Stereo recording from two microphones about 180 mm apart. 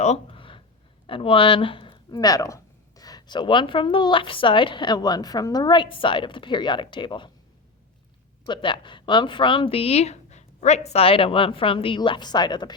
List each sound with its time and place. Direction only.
0.0 s a sound: 35° left (ahead or behind)
1.0 s speech: 30° left (ahead or behind)
8.4 s speech: 25° left (ahead or behind)